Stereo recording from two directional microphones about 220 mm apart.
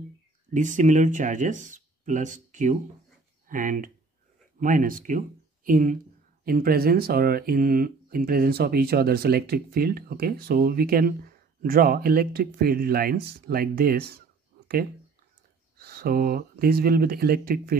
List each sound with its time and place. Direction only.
0.5 s speech: 35° right (ahead or behind)
15.8 s speech: 45° right (ahead or behind)